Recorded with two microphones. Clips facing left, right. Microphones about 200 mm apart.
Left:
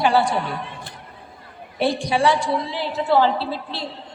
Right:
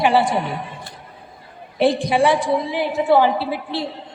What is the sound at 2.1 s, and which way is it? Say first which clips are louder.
A woman's voice: right 3 dB; 20° right (ahead or behind).